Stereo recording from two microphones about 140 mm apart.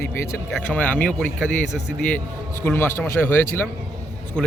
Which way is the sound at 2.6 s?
15° left (ahead or behind).